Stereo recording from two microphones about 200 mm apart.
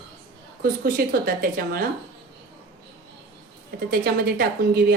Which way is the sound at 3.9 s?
50° right (ahead or behind).